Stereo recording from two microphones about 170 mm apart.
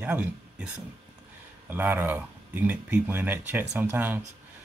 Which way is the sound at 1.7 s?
10° right (ahead or behind).